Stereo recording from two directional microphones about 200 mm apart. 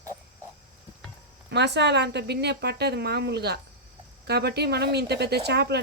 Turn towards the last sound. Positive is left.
turn(degrees=-55)  # may be behind; listen again after turning